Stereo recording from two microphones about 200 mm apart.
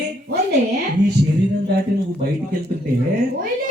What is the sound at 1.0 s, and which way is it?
Speech, 65° right (ahead or behind).